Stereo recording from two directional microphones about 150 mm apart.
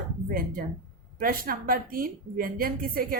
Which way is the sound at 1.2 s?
75° right (ahead or behind).